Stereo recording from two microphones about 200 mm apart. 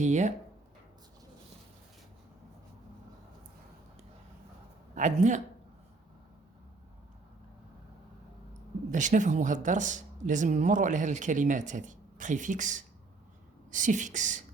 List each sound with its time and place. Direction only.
0.0 s speech: 35° right (ahead or behind)
4.9 s speech: 40° right (ahead or behind)
8.9 s speech: 40° right (ahead or behind)